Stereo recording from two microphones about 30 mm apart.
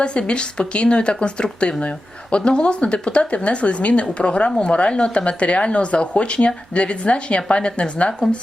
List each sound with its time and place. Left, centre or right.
0.0 s speech: left